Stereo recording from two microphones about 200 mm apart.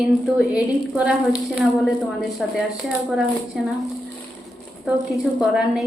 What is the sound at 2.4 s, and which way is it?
A woman's voice, centre (ahead or behind).